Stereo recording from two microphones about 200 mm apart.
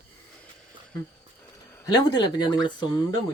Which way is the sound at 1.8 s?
20° left (ahead or behind).